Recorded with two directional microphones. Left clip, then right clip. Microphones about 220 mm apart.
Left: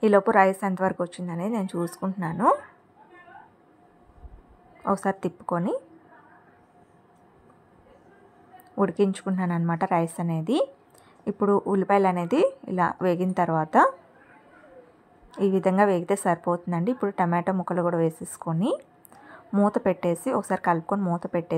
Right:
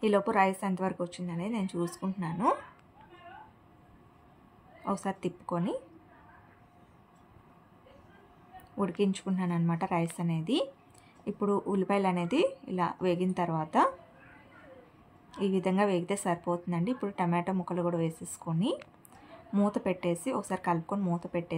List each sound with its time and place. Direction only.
0.0 s speech: 30° left (ahead or behind)
4.8 s speech: 25° left (ahead or behind)
8.7 s speech: 25° left (ahead or behind)
15.3 s a woman's voice: 25° left (ahead or behind)